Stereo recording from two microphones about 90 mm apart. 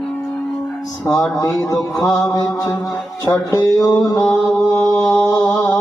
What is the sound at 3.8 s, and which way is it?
Mantra, 40° left (ahead or behind).